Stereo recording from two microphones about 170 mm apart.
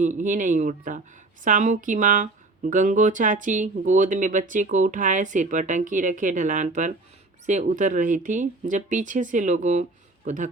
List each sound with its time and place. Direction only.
0.0 s speech: 45° right (ahead or behind)